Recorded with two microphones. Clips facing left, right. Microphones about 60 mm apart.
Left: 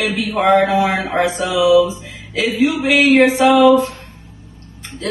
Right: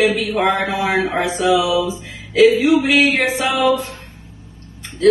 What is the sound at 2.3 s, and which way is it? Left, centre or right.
Speech, centre.